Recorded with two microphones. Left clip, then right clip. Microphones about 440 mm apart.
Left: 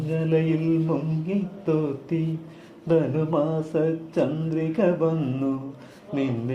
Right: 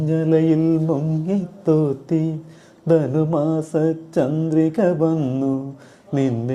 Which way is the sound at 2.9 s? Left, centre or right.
Right.